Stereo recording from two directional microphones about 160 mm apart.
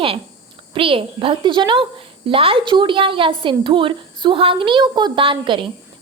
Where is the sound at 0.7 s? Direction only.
35° right (ahead or behind).